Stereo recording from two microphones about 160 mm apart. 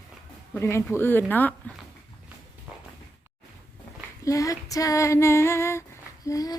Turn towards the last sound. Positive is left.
turn(degrees=20)  # may be behind; listen again after turning